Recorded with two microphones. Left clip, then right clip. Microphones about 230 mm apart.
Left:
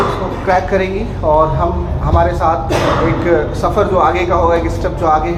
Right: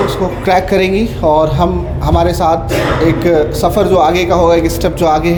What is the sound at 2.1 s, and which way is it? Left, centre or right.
Speech, right.